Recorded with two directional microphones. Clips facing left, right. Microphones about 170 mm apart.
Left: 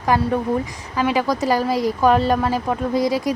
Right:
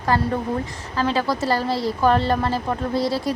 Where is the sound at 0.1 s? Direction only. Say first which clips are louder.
Left 3 dB; 15° left (ahead or behind).